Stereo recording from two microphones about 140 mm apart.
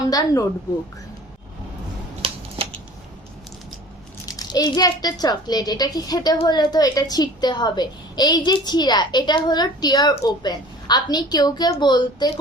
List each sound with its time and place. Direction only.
0.1 s a woman's voice: 25° left (ahead or behind)
4.3 s a woman's voice: 25° left (ahead or behind)